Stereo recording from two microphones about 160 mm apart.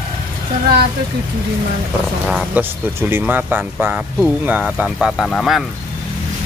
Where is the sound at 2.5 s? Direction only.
10° right (ahead or behind).